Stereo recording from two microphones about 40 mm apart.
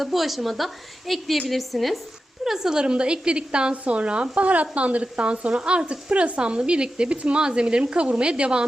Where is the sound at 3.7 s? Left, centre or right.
Right.